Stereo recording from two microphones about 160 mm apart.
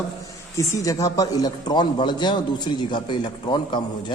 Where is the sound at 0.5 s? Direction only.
20° left (ahead or behind).